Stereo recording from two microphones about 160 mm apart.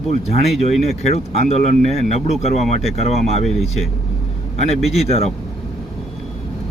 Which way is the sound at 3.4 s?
Centre (ahead or behind).